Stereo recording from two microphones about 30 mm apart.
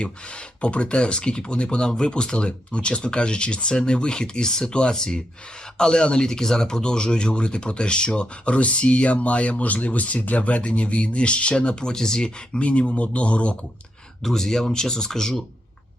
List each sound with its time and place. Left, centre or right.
0.0 s speech: left
12.5 s speech: left
14.2 s speech: centre